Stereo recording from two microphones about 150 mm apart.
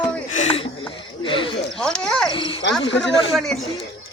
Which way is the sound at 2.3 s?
35° left (ahead or behind).